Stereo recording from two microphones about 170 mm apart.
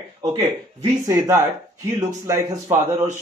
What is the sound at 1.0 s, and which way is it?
Speech, 15° right (ahead or behind).